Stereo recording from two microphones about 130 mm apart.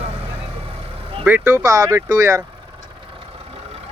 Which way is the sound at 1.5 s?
25° right (ahead or behind).